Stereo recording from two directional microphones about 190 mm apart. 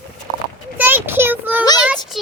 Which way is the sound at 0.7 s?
10° right (ahead or behind).